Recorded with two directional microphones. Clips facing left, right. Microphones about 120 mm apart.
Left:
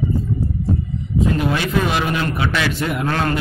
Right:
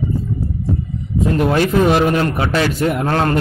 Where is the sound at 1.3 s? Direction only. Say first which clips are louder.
Right 5 dB; 45° right (ahead or behind).